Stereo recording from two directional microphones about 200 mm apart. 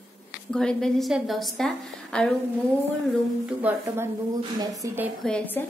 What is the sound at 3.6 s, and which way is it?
Speech, 10° right (ahead or behind).